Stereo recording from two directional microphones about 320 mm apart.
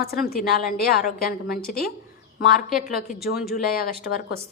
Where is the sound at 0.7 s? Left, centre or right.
Left.